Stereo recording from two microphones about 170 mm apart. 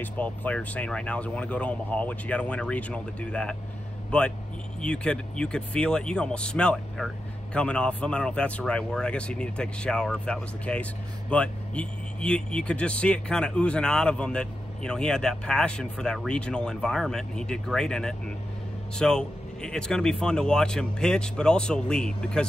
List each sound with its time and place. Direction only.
0.0 s speech: 10° left (ahead or behind)